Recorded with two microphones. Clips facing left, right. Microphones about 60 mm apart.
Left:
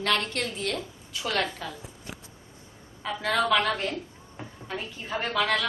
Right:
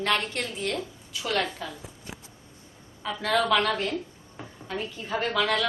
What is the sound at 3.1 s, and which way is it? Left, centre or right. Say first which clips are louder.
A woman's voice: right 1 dB; centre.